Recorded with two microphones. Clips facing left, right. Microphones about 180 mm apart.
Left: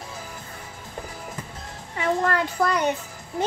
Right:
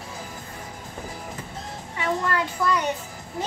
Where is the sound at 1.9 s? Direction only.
45° left (ahead or behind).